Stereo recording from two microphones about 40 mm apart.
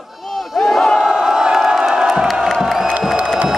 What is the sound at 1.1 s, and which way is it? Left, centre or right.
Crowd, centre.